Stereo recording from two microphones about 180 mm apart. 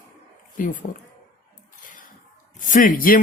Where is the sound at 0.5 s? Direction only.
45° left (ahead or behind).